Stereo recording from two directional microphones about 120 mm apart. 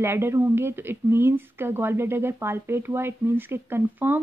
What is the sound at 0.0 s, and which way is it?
Speech, 20° right (ahead or behind).